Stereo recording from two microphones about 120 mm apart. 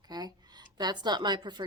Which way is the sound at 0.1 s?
35° right (ahead or behind).